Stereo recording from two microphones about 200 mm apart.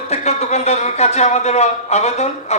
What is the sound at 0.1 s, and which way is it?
A man's voice, 35° left (ahead or behind).